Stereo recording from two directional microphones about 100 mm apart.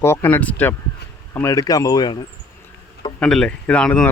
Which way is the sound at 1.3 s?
30° left (ahead or behind).